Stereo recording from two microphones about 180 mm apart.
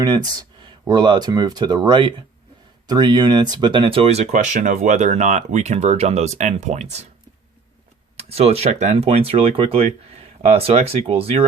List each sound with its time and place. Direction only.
0.0 s speech: 20° right (ahead or behind); by 7.1 s 40° right (ahead or behind)
8.1 s speech: 35° right (ahead or behind)